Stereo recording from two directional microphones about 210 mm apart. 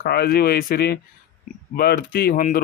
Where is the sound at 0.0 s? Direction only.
45° left (ahead or behind).